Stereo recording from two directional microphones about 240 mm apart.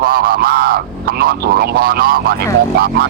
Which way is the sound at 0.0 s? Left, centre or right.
Right.